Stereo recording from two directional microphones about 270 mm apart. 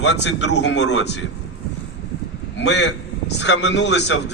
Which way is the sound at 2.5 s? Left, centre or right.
Left.